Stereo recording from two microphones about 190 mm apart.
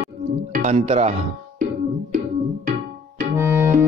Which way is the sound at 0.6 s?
35° right (ahead or behind).